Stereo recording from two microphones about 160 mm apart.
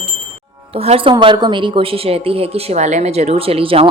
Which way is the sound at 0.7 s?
35° right (ahead or behind).